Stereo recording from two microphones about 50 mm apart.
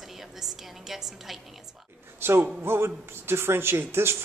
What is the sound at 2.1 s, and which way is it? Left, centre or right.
A man's voice, right.